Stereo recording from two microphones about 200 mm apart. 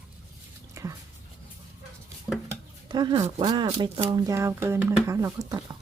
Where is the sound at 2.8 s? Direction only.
20° right (ahead or behind).